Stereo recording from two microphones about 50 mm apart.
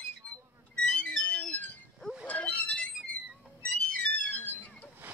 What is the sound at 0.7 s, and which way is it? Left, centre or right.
Music, left.